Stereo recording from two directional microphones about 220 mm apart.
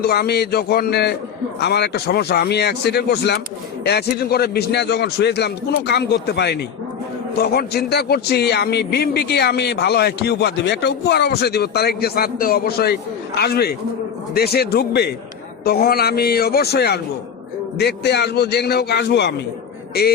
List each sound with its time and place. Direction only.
0.0 s a man's voice: 45° left (ahead or behind)